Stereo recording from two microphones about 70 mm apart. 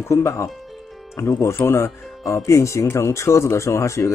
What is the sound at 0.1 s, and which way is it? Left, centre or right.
Speech, left.